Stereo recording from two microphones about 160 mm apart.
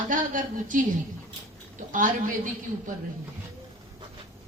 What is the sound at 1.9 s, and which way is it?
Speech, 55° right (ahead or behind).